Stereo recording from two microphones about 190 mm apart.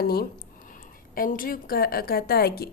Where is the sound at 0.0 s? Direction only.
55° left (ahead or behind).